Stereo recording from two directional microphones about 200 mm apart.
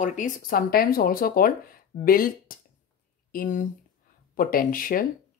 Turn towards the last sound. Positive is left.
turn(degrees=45)  # may be behind; listen again after turning